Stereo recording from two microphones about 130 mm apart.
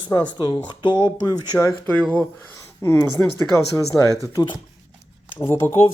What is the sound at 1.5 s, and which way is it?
Speech, 15° left (ahead or behind).